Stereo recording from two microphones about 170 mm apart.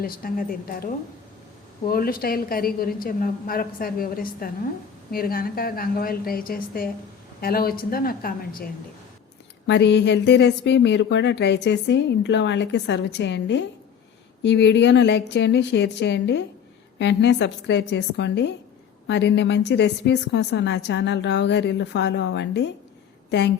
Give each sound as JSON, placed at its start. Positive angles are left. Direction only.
{"t": 0.0, "sound": "a woman's voice", "side_deg": 60}
{"t": 9.6, "sound": "a woman's voice", "side_deg": 90}